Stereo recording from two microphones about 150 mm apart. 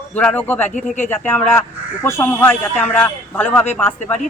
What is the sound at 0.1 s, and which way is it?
A man's voice, 10° left (ahead or behind).